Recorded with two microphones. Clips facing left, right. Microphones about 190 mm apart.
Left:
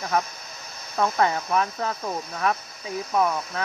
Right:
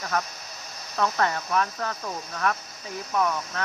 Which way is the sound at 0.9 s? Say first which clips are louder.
Left 3 dB; 15° left (ahead or behind).